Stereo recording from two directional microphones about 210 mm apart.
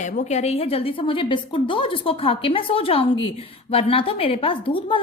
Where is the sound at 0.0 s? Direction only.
35° left (ahead or behind).